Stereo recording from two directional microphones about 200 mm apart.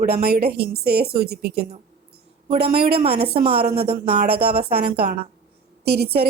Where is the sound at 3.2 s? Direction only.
50° right (ahead or behind).